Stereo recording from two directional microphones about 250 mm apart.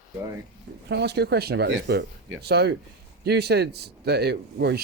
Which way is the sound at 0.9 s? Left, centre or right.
Right.